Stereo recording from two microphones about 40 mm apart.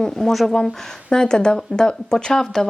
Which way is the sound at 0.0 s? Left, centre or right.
Centre.